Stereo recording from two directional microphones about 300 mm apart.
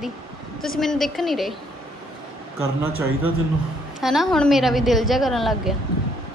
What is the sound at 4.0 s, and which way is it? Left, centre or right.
A woman's voice, centre.